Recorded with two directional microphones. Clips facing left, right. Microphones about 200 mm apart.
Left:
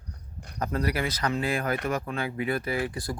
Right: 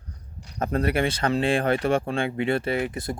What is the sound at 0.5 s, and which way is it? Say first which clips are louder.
Speech: right 5 dB; 25° right (ahead or behind).